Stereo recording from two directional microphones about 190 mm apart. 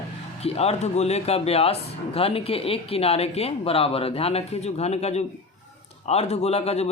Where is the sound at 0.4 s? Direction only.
35° left (ahead or behind).